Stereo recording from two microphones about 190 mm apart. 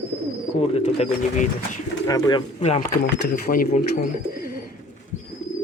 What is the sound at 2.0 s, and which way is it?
Speech, 20° left (ahead or behind).